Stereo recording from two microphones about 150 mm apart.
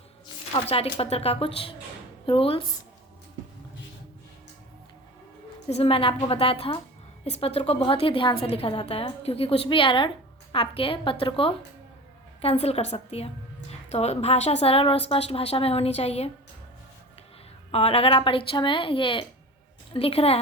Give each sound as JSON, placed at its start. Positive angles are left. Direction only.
{"t": 0.5, "sound": "a woman's voice", "side_deg": 40}
{"t": 5.6, "sound": "a woman's voice", "side_deg": 40}
{"t": 17.7, "sound": "a woman's voice", "side_deg": 40}